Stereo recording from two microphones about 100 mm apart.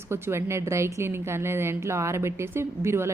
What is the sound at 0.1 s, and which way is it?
A woman's voice, 25° right (ahead or behind).